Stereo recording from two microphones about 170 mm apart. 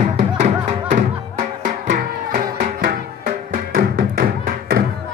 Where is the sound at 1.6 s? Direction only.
55° right (ahead or behind).